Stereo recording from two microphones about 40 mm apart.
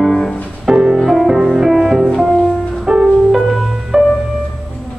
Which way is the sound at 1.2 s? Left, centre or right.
Centre.